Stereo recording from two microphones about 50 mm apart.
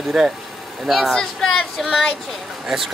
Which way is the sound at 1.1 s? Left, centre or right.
Centre.